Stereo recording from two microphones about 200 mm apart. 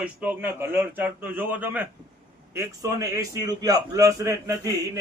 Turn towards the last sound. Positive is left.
turn(degrees=-15)  # may be behind; listen again after turning